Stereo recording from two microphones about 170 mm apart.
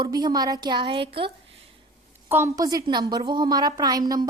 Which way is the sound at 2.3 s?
15° right (ahead or behind).